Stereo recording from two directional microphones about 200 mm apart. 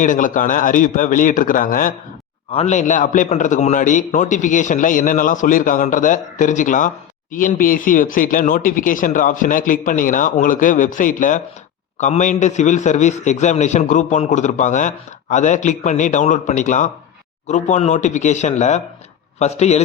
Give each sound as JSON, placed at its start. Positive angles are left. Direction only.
{"t": 0.0, "sound": "a man's voice", "side_deg": 40}
{"t": 2.5, "sound": "a man's voice", "side_deg": 30}